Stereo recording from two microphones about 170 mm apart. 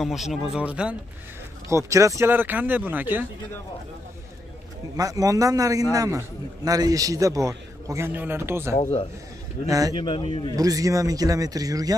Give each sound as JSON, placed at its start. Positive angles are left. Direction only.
{"t": 0.0, "sound": "speech", "side_deg": 0}
{"t": 1.7, "sound": "speech", "side_deg": -20}
{"t": 4.9, "sound": "a man's voice", "side_deg": -20}
{"t": 9.9, "sound": "a man's voice", "side_deg": 30}
{"t": 10.5, "sound": "a man's voice", "side_deg": -20}